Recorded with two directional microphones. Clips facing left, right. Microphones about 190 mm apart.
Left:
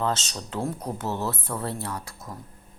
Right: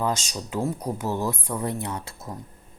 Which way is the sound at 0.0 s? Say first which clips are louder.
Right 1 dB; 10° right (ahead or behind).